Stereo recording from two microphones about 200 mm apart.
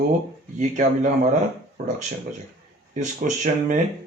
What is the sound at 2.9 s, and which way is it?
Speech, 40° right (ahead or behind).